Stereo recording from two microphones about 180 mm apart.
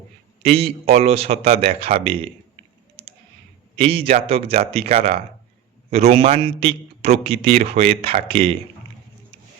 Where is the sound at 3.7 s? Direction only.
30° right (ahead or behind).